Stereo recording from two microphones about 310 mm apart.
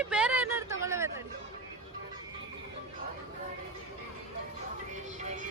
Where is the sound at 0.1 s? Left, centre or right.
Centre.